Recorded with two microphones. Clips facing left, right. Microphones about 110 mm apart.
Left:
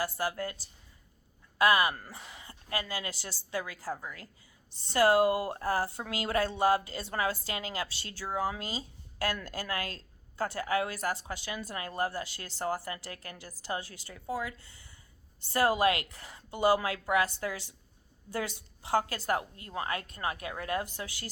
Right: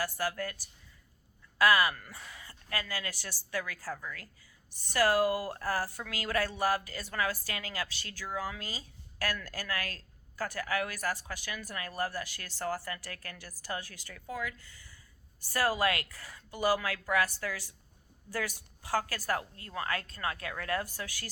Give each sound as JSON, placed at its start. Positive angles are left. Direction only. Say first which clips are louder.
{"t": 0.0, "sound": "speech", "louder": "left 1 dB", "side_deg": 20}
{"t": 1.5, "sound": "speech", "louder": "left 1 dB", "side_deg": 20}